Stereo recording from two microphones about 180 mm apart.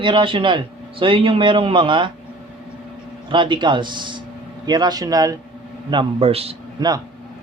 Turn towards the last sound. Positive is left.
turn(degrees=-25)  # may be behind; listen again after turning